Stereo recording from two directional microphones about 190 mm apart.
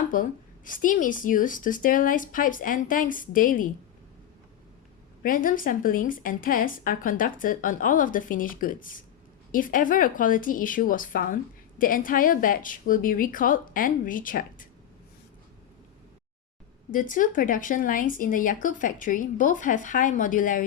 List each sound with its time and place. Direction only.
0.1 s a woman's voice: 45° left (ahead or behind)
5.2 s a woman's voice: 45° left (ahead or behind)
16.9 s a woman's voice: 45° left (ahead or behind)